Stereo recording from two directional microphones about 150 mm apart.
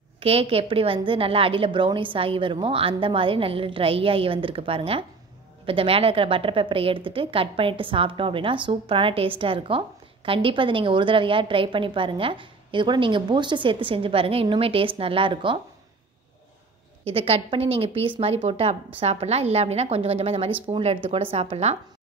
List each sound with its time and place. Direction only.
0.2 s a woman's voice: 40° right (ahead or behind)
17.0 s a woman's voice: 40° right (ahead or behind)